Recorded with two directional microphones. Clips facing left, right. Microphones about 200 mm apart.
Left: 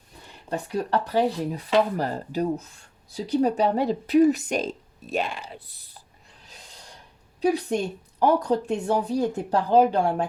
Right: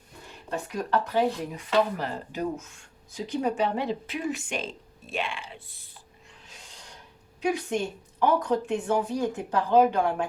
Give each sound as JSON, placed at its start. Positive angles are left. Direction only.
{"t": 0.5, "sound": "speech", "side_deg": 35}
{"t": 7.4, "sound": "speech", "side_deg": 35}